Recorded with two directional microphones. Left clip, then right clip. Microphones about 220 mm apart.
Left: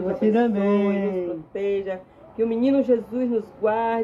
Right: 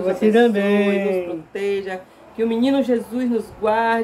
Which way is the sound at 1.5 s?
5° right (ahead or behind).